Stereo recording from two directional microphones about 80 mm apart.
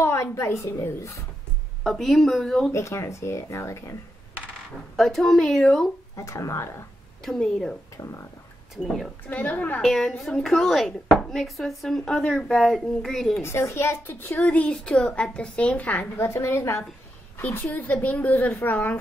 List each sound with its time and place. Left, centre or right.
0.0 s speech: left
1.8 s speech: centre
2.7 s speech: left
4.9 s speech: centre
6.1 s speech: left
7.2 s speech: centre
8.0 s speech: left
8.7 s speech: centre
9.3 s speech: left
9.8 s speech: centre
13.4 s speech: left
14.4 s a woman's voice: centre; by 16.8 s left
17.4 s speech: left